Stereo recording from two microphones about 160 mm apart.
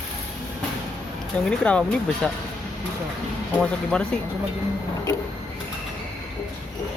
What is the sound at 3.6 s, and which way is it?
Speech, 5° left (ahead or behind).